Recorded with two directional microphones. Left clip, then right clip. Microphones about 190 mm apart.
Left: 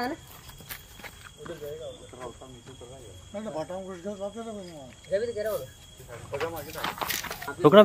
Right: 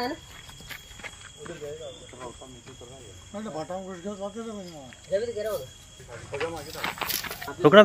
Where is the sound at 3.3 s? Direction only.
50° right (ahead or behind).